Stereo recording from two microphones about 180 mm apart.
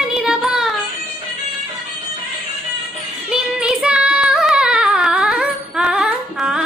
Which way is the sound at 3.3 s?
5° right (ahead or behind).